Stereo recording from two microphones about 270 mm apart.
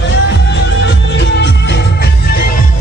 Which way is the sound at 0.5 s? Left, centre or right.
Left.